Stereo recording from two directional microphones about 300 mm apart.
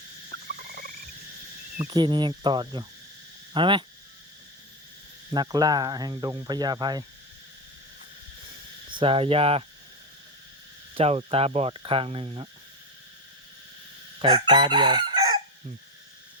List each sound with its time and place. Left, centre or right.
0.3 s rodents: right
1.9 s speech: centre
5.3 s speech: centre
8.9 s speech: centre
10.9 s speech: centre
14.2 s speech: centre